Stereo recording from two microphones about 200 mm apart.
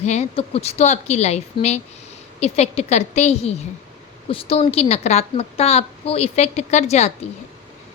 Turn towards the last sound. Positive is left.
turn(degrees=35)  # may be behind; listen again after turning